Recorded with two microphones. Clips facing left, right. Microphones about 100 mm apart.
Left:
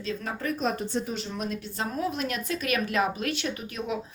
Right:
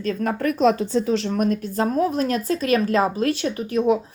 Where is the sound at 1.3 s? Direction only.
50° right (ahead or behind).